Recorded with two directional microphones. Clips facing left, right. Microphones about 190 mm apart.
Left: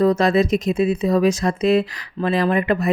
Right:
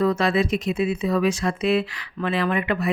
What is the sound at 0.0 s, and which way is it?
Speech, 40° left (ahead or behind).